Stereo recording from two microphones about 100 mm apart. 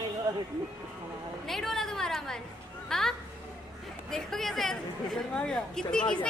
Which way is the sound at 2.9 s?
Centre (ahead or behind).